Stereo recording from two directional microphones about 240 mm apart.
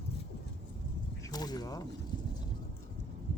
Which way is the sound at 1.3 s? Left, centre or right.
Centre.